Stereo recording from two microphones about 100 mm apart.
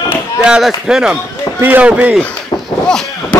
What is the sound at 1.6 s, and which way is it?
Speech, 15° right (ahead or behind).